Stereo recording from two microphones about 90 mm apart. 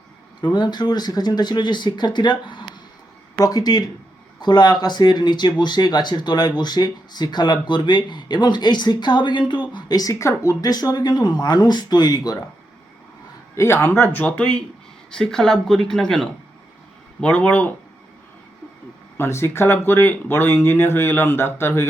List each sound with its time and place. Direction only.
0.4 s speech: 60° left (ahead or behind)
3.3 s speech: 45° left (ahead or behind)
9.7 s a woman's voice: 45° left (ahead or behind)
10.6 s speech: 45° left (ahead or behind)
13.6 s speech: 25° left (ahead or behind)
19.1 s speech: 30° left (ahead or behind)